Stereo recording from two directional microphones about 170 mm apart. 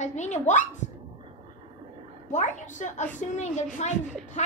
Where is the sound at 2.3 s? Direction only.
45° left (ahead or behind).